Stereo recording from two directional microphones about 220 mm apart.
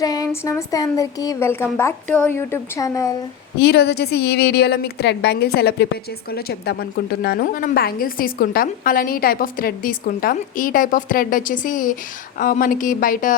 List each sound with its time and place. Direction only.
0.0 s a sound: 15° left (ahead or behind)
0.4 s a woman's voice: 15° left (ahead or behind)
3.6 s a woman's voice: 50° left (ahead or behind)